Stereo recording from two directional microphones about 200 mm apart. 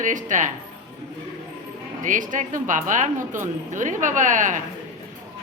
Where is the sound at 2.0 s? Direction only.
40° right (ahead or behind).